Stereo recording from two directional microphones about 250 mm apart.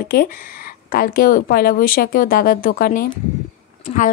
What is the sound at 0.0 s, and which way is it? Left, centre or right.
Speech, left.